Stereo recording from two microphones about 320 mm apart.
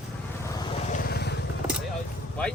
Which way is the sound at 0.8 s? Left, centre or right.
Left.